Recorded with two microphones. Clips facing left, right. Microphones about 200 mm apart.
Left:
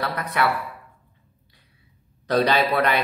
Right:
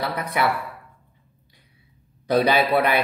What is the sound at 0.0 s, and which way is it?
Speech, 10° right (ahead or behind).